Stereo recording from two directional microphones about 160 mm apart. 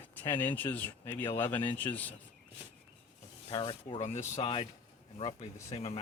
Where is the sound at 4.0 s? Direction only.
45° left (ahead or behind).